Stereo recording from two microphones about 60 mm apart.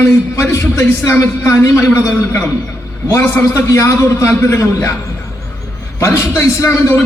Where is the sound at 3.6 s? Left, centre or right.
Left.